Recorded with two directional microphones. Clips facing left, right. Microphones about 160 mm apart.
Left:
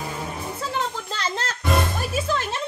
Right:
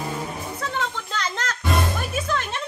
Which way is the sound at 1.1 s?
30° left (ahead or behind).